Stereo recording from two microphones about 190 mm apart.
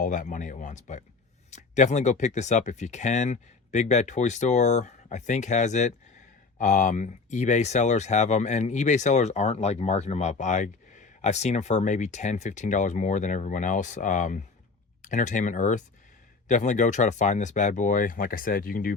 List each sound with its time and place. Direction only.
0.0 s speech: 40° left (ahead or behind)